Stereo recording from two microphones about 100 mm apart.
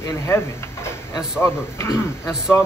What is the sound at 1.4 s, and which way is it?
Speech, 25° left (ahead or behind).